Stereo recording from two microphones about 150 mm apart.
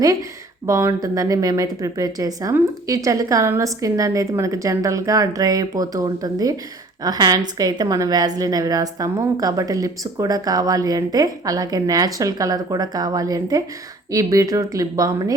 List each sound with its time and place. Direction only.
0.0 s speech: 25° right (ahead or behind)